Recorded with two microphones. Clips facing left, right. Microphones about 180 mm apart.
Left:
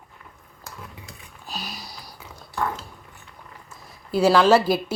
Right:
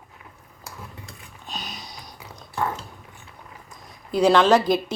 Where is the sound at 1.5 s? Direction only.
Centre (ahead or behind).